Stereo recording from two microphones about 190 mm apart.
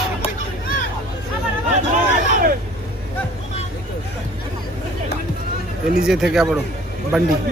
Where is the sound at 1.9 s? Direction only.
45° right (ahead or behind).